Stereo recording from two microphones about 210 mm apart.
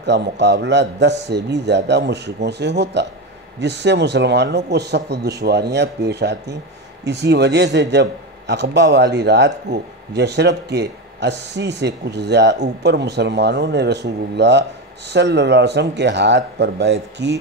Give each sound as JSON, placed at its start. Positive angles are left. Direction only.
{"t": 0.0, "sound": "a man's voice", "side_deg": -55}